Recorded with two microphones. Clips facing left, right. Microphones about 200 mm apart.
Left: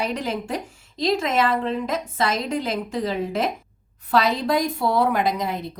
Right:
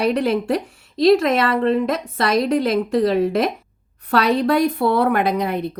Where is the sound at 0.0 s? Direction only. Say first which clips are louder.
Right 8 dB; 65° right (ahead or behind).